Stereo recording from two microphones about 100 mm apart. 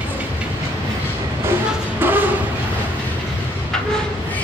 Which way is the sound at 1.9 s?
20° right (ahead or behind).